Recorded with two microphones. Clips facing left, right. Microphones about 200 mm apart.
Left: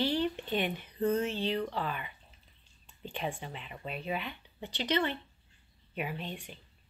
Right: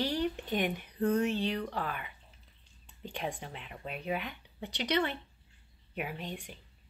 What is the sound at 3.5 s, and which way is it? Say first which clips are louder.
A woman's voice: left 1 dB; 5° right (ahead or behind).